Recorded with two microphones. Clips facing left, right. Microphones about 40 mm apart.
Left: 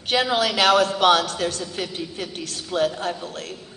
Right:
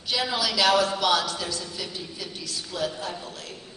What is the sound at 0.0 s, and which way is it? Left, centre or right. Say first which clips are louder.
A woman's voice: left 6 dB; left.